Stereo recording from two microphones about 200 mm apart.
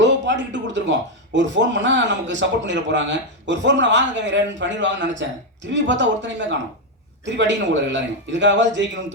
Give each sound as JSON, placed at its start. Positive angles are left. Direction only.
{"t": 0.0, "sound": "a man's voice", "side_deg": -65}